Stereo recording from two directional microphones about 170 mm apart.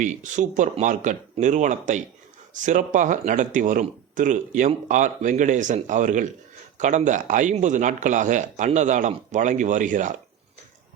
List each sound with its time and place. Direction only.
0.0 s speech: 45° right (ahead or behind)